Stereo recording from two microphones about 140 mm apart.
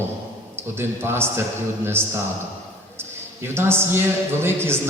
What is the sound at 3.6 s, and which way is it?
A man's voice, 15° right (ahead or behind).